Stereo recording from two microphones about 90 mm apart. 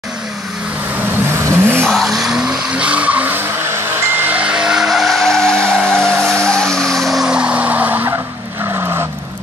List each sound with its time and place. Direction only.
1.8 s vehicle: 5° left (ahead or behind)
5.9 s skidding: 10° left (ahead or behind)
6.4 s vehicle: 10° left (ahead or behind); by 8.1 s 20° right (ahead or behind)